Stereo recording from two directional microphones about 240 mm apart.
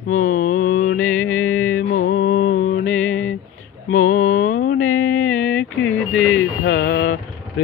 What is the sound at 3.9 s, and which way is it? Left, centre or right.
Mantra, left.